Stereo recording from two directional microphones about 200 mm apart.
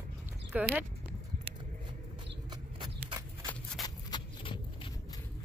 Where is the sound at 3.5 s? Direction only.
20° left (ahead or behind).